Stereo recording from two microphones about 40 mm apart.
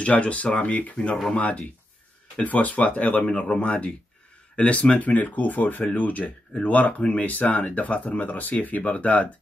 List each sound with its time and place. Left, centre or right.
0.0 s speech: left
3.3 s speech: left